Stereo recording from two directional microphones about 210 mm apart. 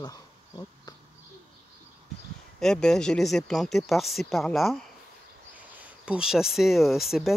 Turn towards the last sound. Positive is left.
turn(degrees=0)  # may be behind; listen again after turning